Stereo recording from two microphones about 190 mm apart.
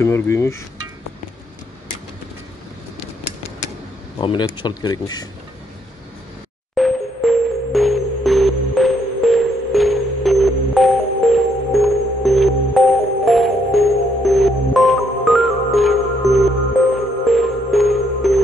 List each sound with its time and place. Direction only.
0.0 s a sound: 15° left (ahead or behind)
4.2 s speech: 25° left (ahead or behind)
6.7 s music: centre (ahead or behind)